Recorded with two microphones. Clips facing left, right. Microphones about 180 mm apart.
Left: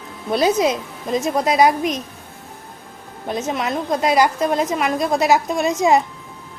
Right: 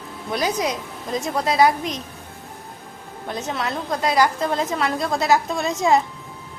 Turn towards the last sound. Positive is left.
turn(degrees=20)  # may be behind; listen again after turning